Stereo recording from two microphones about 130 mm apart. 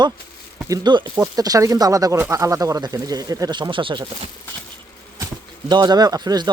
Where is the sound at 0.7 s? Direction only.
35° right (ahead or behind).